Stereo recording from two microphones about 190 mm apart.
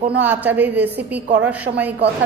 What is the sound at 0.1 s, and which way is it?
A woman's voice, 10° right (ahead or behind).